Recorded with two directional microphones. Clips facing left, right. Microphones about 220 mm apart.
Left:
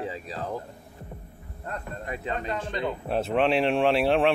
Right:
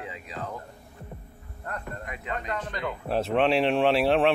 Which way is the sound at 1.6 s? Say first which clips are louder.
Left 1 dB; 25° left (ahead or behind).